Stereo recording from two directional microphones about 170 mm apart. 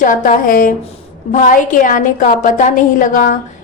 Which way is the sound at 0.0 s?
50° left (ahead or behind).